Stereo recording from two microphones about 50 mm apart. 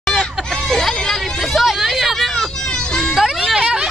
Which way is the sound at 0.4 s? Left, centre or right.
Centre.